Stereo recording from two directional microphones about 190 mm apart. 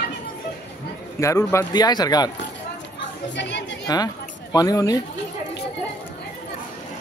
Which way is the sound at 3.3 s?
65° left (ahead or behind).